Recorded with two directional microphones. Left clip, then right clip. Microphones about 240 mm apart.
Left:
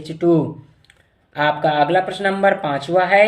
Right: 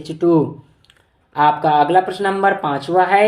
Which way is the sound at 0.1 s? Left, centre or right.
Centre.